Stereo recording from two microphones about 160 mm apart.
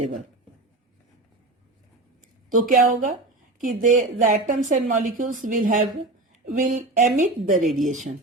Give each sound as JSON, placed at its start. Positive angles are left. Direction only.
{"t": 2.5, "sound": "a woman's voice", "side_deg": -60}